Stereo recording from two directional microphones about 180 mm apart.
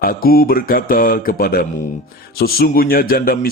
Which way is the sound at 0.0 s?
55° left (ahead or behind).